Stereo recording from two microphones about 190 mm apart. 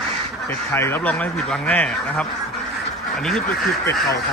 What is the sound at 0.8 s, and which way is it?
Speech, 10° left (ahead or behind).